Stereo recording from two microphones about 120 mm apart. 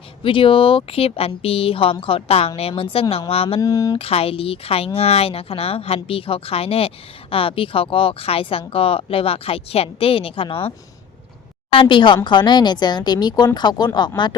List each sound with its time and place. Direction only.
0.2 s a woman's voice: 45° left (ahead or behind)
3.6 s speech: 30° left (ahead or behind)
3.9 s a woman's voice: 55° left (ahead or behind); by 14.1 s 35° left (ahead or behind)